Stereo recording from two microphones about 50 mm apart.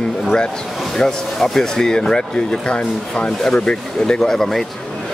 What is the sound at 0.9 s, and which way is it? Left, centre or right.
Speech, centre.